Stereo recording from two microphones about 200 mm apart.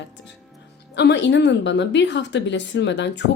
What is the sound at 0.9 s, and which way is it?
A woman's voice, 60° left (ahead or behind).